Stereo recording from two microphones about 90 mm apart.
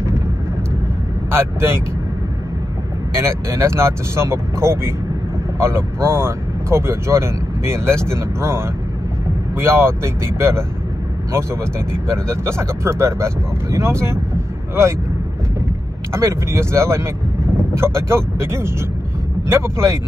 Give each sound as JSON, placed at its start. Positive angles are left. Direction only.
{"t": 1.3, "sound": "speech", "side_deg": -30}
{"t": 3.2, "sound": "speech", "side_deg": -30}
{"t": 11.9, "sound": "speech", "side_deg": -30}
{"t": 16.1, "sound": "speech", "side_deg": -30}